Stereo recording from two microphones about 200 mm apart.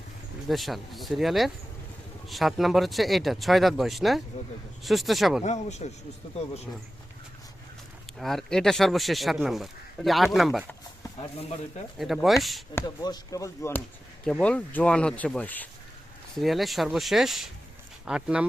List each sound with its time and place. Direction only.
0.4 s speech: centre (ahead or behind)
5.4 s speech: 35° left (ahead or behind)
8.2 s speech: centre (ahead or behind)
11.9 s speech: centre (ahead or behind)
12.7 s speech: 20° left (ahead or behind)
14.3 s speech: 5° left (ahead or behind)